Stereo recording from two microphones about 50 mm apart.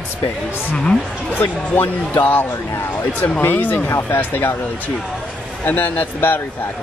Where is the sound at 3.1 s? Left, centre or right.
Left.